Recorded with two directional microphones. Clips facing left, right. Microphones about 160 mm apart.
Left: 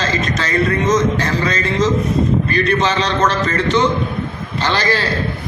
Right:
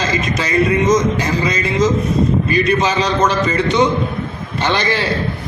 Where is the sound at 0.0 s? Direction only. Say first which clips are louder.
Right 1 dB; 10° right (ahead or behind).